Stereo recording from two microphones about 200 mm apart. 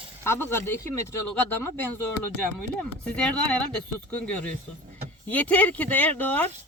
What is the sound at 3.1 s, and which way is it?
Speech, 5° left (ahead or behind).